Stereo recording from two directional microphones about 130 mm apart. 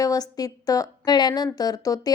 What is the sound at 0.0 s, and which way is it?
A woman's voice, 30° left (ahead or behind).